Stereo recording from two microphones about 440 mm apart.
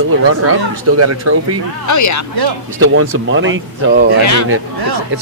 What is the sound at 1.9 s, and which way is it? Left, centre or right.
Speech, left.